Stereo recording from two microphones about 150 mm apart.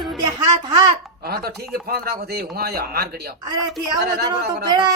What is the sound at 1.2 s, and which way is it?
A man's voice, 90° right.